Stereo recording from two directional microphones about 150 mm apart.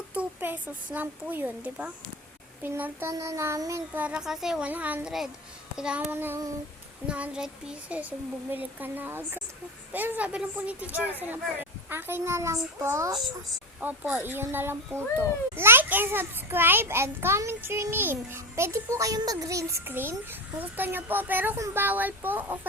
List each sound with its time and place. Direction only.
0.1 s a child's voice: 10° right (ahead or behind)